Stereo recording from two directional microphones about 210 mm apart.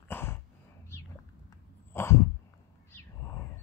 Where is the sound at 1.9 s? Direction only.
10° left (ahead or behind).